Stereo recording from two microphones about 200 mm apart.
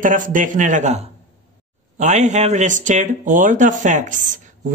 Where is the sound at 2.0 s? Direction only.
35° right (ahead or behind).